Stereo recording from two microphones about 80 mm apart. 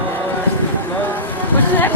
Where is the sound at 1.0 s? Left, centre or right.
Left.